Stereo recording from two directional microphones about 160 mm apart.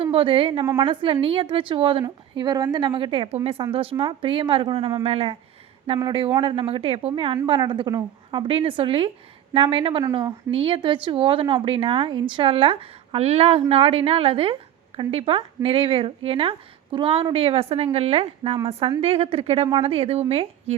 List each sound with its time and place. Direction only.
0.0 s a woman's voice: 35° right (ahead or behind)